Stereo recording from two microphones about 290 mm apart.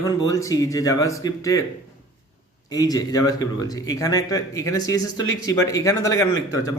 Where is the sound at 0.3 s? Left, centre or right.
Centre.